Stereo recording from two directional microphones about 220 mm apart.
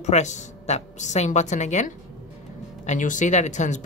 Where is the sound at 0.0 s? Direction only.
30° left (ahead or behind).